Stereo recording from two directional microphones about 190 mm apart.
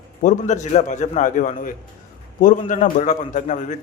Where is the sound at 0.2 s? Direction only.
40° left (ahead or behind).